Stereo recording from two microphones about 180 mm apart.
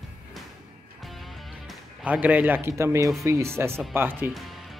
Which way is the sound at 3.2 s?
15° right (ahead or behind).